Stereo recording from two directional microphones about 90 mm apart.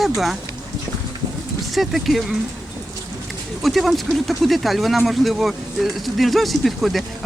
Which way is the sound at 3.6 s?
Centre (ahead or behind).